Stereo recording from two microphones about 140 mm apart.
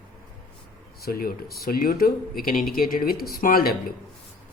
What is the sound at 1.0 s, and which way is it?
Speech, 90° left.